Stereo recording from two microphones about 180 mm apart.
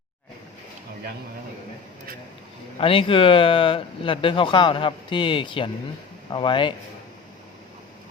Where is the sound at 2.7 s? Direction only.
30° left (ahead or behind).